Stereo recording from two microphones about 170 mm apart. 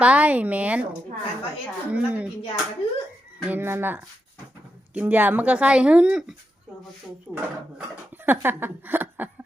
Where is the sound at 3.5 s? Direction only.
15° right (ahead or behind).